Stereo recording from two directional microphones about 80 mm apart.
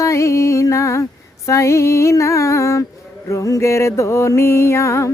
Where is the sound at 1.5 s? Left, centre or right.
Left.